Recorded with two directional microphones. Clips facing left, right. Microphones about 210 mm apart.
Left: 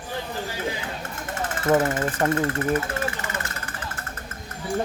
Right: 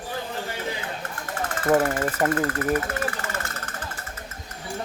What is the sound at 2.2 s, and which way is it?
Speech, 25° left (ahead or behind).